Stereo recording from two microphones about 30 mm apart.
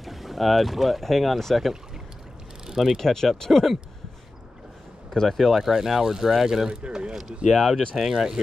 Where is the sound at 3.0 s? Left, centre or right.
Centre.